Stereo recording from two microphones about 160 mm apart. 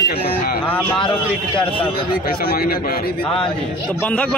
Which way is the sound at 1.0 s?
30° left (ahead or behind).